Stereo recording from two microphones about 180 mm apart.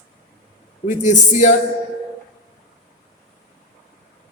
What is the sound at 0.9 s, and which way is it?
Speech, 40° left (ahead or behind).